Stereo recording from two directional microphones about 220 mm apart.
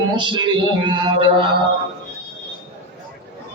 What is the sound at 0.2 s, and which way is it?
Mantra, 20° right (ahead or behind).